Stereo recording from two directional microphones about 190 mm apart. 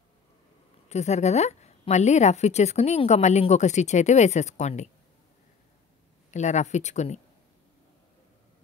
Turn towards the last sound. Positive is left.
turn(degrees=35)  # may be behind; listen again after turning